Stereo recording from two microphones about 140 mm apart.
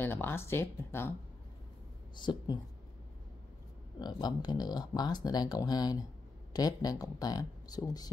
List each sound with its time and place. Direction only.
0.0 s speech: 15° left (ahead or behind)
2.1 s a woman's voice: 30° left (ahead or behind)
4.0 s speech: 30° left (ahead or behind)